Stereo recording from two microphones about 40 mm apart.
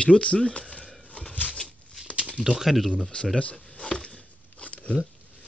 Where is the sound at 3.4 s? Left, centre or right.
Left.